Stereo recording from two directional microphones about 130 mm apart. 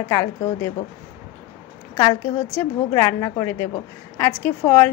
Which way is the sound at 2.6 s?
25° left (ahead or behind).